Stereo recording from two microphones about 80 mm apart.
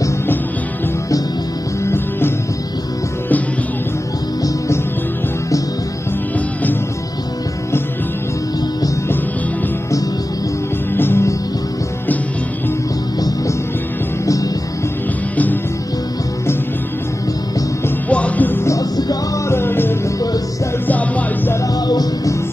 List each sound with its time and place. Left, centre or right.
1.9 s music: left
11.0 s music: left
14.2 s music: left
18.1 s music: centre
18.7 s music: left
19.5 s music: left
21.8 s music: left